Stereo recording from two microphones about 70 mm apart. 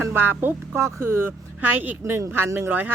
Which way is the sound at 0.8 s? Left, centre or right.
Right.